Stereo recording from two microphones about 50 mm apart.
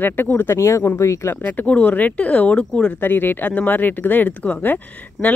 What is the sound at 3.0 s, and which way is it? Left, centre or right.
Speech, left.